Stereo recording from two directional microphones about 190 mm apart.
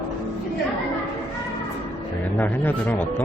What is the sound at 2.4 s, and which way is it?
Speech, 10° left (ahead or behind).